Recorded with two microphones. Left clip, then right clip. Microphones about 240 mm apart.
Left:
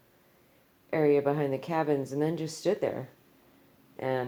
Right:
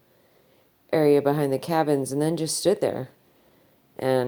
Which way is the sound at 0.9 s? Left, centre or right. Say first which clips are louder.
Right 5 dB; right.